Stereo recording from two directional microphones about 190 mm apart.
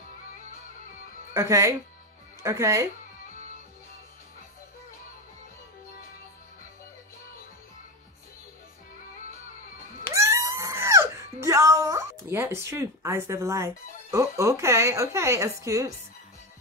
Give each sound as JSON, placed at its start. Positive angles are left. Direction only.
{"t": 1.3, "sound": "speech", "side_deg": -15}
{"t": 10.1, "sound": "a sound", "side_deg": -15}
{"t": 11.4, "sound": "speech", "side_deg": -15}